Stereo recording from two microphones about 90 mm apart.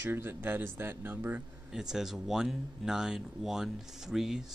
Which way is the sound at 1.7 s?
5° right (ahead or behind).